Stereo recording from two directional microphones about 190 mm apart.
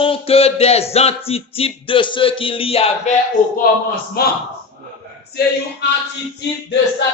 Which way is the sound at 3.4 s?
40° left (ahead or behind).